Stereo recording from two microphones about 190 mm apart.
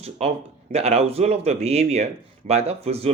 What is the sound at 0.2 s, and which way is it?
Speech, 35° right (ahead or behind).